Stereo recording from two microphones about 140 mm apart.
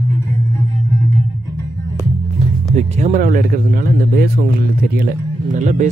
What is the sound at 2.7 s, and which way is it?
Speech, 55° right (ahead or behind).